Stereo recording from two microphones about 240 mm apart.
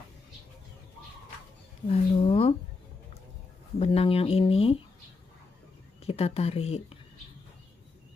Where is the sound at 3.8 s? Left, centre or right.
Left.